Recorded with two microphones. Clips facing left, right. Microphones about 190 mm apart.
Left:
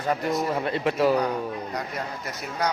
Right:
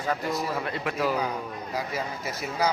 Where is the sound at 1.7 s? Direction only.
5° right (ahead or behind).